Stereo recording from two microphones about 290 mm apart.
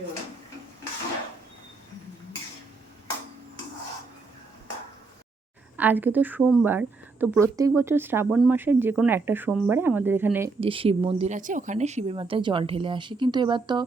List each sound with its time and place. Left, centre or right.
5.7 s a woman's voice: centre
10.6 s a woman's voice: centre